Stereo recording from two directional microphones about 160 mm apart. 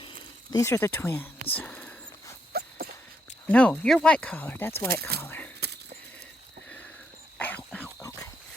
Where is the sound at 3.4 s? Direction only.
5° left (ahead or behind).